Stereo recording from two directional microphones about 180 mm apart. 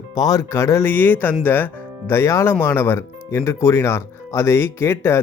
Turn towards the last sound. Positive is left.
turn(degrees=15)  # may be behind; listen again after turning